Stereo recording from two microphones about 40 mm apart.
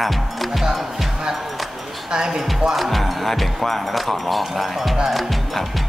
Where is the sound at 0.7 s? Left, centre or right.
Centre.